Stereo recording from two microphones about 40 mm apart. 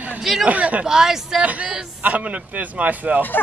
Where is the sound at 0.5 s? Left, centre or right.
Right.